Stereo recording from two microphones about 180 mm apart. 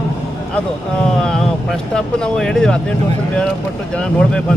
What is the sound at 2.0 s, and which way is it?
Speech, 5° left (ahead or behind).